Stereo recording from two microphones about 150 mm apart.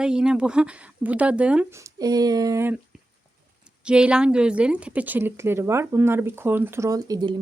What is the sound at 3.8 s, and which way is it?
Speech, 5° right (ahead or behind).